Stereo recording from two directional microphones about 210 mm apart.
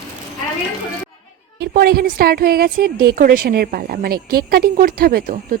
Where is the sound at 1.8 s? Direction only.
45° right (ahead or behind).